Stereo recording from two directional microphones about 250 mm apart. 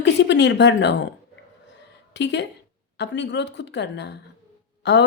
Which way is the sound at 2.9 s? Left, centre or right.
Left.